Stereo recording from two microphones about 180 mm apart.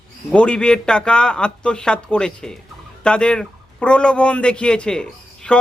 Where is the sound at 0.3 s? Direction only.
5° left (ahead or behind).